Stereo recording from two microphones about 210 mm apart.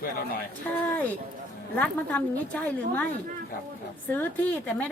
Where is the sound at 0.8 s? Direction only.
10° left (ahead or behind).